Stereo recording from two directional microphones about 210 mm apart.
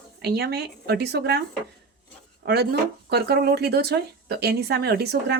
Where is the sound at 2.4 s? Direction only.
50° right (ahead or behind).